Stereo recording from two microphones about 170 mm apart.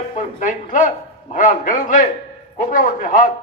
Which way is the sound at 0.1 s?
50° left (ahead or behind).